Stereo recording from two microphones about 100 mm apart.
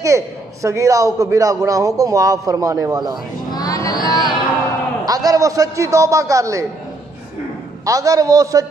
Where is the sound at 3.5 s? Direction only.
35° left (ahead or behind).